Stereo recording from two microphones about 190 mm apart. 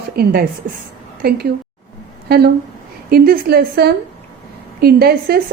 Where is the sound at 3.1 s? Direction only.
50° right (ahead or behind).